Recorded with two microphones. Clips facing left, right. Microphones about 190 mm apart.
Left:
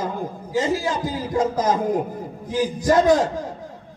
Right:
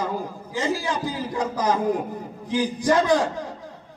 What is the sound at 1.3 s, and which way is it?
Speech, 45° left (ahead or behind).